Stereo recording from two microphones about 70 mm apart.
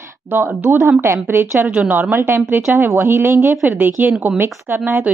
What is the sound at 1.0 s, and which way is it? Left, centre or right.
Speech, right.